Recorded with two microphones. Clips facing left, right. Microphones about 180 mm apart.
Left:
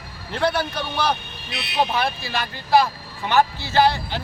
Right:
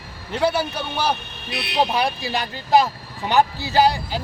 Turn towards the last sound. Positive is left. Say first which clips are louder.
# right 1 dB
turn(degrees=-15)  # may be behind; listen again after turning